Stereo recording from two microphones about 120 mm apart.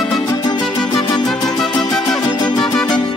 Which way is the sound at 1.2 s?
5° left (ahead or behind).